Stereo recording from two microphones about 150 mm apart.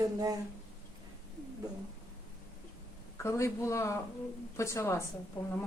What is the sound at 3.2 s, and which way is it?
A woman's voice, 20° left (ahead or behind).